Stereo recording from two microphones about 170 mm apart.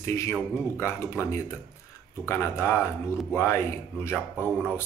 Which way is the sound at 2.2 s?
15° left (ahead or behind).